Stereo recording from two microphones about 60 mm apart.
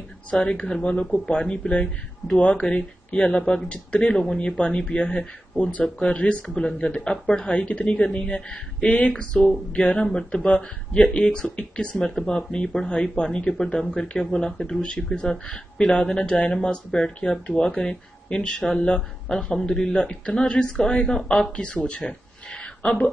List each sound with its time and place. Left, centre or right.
0.3 s speech: centre